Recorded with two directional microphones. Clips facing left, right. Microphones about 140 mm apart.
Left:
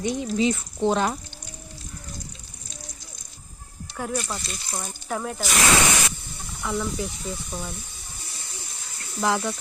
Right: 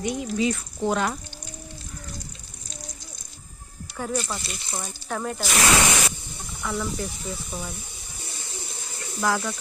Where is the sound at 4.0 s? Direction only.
Centre (ahead or behind).